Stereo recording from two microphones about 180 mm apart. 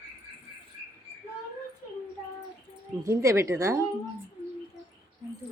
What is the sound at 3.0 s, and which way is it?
Speech, 15° right (ahead or behind).